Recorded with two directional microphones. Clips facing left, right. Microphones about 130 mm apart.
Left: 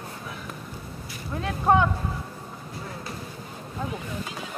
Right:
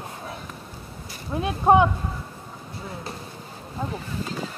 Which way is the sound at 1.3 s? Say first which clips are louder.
Right 4 dB; 20° right (ahead or behind).